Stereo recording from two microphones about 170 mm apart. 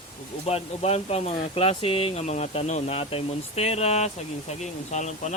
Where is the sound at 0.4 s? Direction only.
35° left (ahead or behind).